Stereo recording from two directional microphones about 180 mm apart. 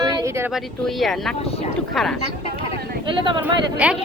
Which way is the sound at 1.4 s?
35° left (ahead or behind).